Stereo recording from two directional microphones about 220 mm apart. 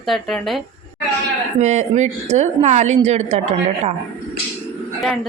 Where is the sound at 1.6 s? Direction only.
30° right (ahead or behind).